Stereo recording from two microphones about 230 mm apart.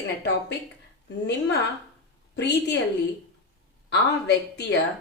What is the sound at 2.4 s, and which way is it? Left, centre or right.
Speech, left.